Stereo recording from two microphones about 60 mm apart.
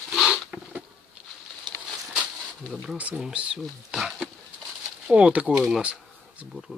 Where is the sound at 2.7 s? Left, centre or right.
Centre.